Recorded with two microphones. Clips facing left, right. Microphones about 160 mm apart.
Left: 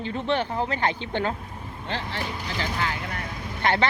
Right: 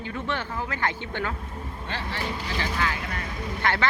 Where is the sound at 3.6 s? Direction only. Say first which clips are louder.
Left 3 dB; 20° left (ahead or behind).